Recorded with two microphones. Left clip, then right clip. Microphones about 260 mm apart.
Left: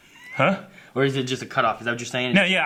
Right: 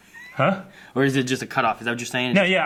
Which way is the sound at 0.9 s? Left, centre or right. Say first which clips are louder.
Right 2 dB; left.